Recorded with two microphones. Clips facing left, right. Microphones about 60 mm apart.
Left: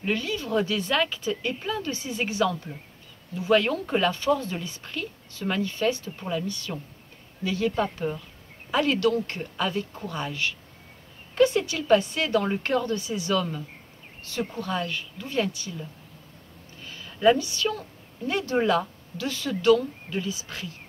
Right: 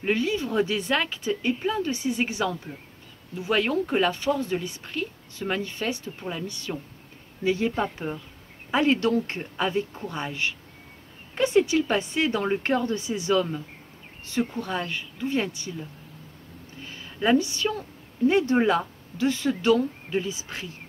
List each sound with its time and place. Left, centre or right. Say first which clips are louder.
0.0 s speech: right 3 dB; centre
16.8 s a sound: left 5 dB; centre
18.2 s speech: right 4 dB; centre